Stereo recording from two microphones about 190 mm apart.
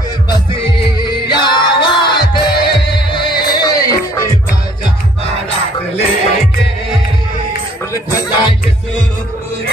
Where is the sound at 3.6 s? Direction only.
20° left (ahead or behind).